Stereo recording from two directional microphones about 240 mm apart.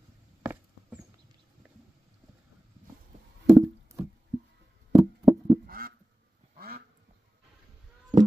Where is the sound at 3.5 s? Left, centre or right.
Centre.